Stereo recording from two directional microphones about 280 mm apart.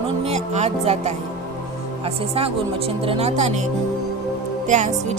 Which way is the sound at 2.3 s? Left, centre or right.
Right.